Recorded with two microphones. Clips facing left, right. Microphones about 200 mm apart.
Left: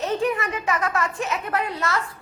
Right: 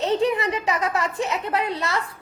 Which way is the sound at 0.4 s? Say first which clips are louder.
Right 1 dB; 20° right (ahead or behind).